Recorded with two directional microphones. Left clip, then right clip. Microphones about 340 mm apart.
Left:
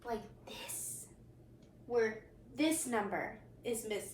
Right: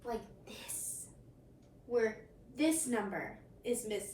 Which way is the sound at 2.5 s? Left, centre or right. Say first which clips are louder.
Right 1 dB; centre.